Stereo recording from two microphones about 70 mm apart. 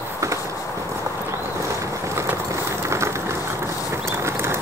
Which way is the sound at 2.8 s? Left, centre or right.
Right.